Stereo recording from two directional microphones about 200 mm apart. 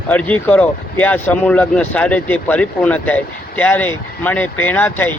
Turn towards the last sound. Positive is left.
turn(degrees=10)  # may be behind; listen again after turning